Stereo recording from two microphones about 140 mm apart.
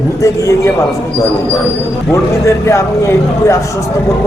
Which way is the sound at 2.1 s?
20° left (ahead or behind).